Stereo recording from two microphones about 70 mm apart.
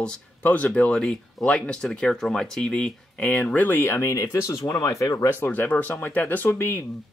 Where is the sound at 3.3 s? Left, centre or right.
Left.